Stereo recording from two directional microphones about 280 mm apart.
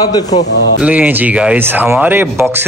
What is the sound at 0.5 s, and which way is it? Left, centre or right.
Speech, left.